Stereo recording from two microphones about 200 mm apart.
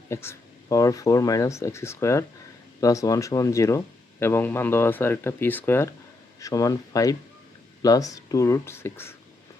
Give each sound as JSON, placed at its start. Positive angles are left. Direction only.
{"t": 0.1, "sound": "speech", "side_deg": 15}